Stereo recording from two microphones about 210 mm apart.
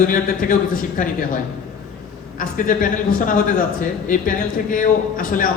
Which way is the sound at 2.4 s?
40° left (ahead or behind).